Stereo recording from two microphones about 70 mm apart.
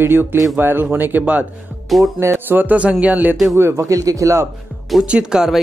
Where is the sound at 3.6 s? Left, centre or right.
Right.